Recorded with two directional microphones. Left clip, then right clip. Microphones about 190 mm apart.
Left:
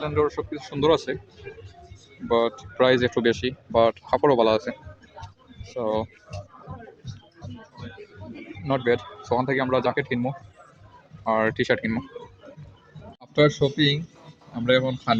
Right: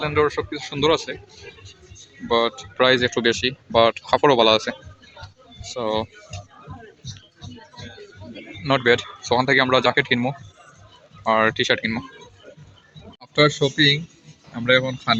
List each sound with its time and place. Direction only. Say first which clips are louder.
0.0 s speech: right 4 dB; centre (ahead or behind)
0.9 s a man's voice: even; 20° left (ahead or behind)
2.2 s speech: right 2 dB; 5° left (ahead or behind)
8.6 s speech: right 5 dB; centre (ahead or behind)
11.5 s speech: right 3 dB; 15° left (ahead or behind)
13.3 s speech: right 2 dB; 5° left (ahead or behind)